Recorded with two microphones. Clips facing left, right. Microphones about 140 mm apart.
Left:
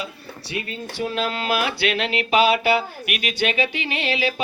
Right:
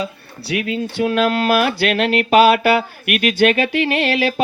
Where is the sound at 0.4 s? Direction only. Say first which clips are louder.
Right 9 dB; 90° right.